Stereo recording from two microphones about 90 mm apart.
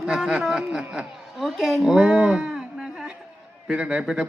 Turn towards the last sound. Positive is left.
turn(degrees=-10)  # may be behind; listen again after turning